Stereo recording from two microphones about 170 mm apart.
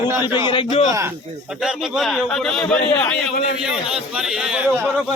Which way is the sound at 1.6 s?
Centre (ahead or behind).